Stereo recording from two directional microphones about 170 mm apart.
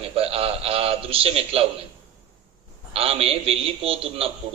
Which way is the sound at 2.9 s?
35° right (ahead or behind).